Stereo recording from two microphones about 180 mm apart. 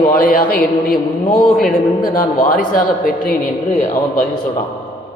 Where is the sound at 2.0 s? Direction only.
50° left (ahead or behind).